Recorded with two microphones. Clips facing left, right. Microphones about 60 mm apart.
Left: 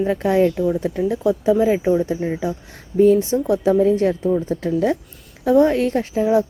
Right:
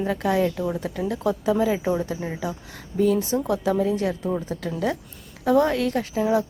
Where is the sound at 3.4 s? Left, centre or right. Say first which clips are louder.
Left 8 dB; left.